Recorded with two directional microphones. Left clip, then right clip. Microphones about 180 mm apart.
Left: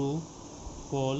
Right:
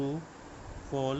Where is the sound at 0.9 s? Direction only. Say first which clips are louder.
Left 1 dB; 30° right (ahead or behind).